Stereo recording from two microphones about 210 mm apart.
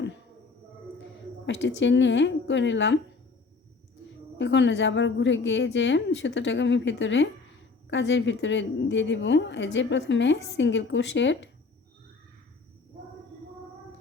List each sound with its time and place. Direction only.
1.5 s a woman's voice: 60° left (ahead or behind)
4.0 s a woman's voice: 60° left (ahead or behind)